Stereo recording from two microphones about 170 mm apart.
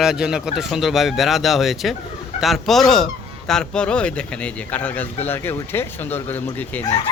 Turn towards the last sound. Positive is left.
turn(degrees=10)  # may be behind; listen again after turning